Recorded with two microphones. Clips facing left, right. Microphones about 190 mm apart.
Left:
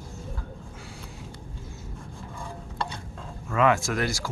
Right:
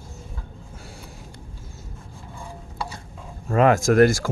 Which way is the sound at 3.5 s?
40° right (ahead or behind).